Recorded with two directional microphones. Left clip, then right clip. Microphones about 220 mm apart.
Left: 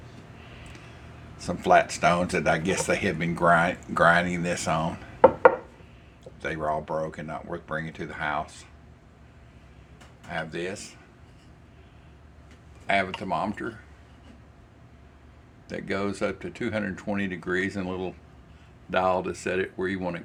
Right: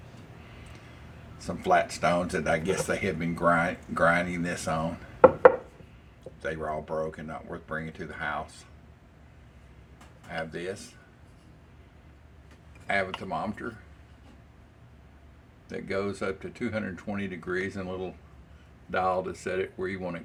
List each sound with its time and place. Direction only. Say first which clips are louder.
1.4 s speech: left 4 dB; 40° left (ahead or behind)
6.4 s speech: left 4 dB; 40° left (ahead or behind)
10.3 s speech: left 2 dB; 40° left (ahead or behind)
12.9 s speech: left 4 dB; 40° left (ahead or behind)
15.7 s speech: left 2 dB; 40° left (ahead or behind)